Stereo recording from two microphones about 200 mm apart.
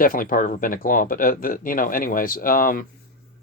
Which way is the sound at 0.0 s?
45° left (ahead or behind).